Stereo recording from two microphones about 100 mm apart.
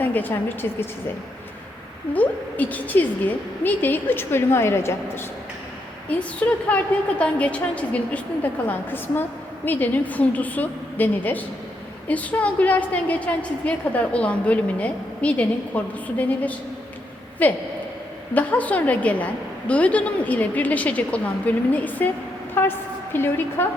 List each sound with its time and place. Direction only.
0.0 s a woman's voice: 20° left (ahead or behind)
2.1 s a woman's voice: 15° left (ahead or behind)
6.1 s a woman's voice: 15° left (ahead or behind)